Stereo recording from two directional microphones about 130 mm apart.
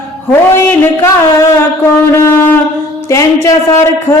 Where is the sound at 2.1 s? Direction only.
20° left (ahead or behind).